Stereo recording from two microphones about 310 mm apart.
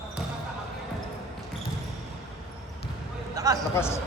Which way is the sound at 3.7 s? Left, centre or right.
Centre.